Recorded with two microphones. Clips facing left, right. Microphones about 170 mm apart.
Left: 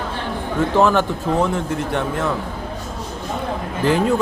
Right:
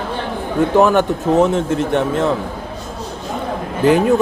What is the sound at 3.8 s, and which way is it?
Speech, 20° right (ahead or behind).